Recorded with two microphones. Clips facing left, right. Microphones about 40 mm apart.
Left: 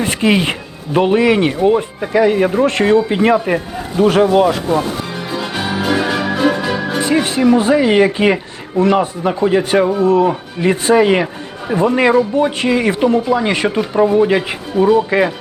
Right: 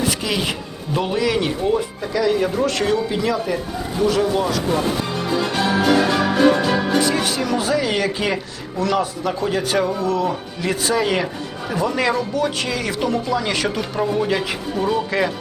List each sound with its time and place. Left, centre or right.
0.0 s speech: left
7.0 s speech: left